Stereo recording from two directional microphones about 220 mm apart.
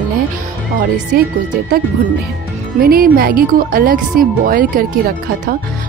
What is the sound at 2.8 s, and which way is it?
A woman's voice, 40° right (ahead or behind).